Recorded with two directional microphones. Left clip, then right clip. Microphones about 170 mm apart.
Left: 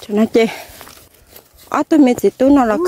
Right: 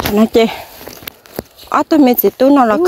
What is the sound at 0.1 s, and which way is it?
Speech, 25° left (ahead or behind).